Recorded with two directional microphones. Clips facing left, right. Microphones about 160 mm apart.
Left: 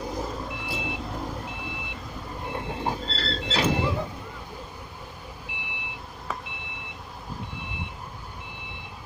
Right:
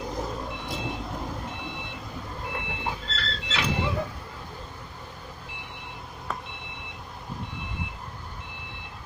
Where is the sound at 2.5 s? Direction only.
40° left (ahead or behind).